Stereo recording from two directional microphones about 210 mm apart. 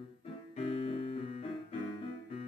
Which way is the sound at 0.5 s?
25° left (ahead or behind).